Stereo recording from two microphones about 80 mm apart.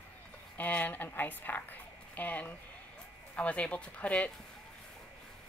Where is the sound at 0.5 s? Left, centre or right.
Left.